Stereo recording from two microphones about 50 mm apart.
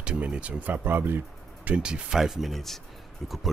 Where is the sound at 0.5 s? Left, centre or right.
Right.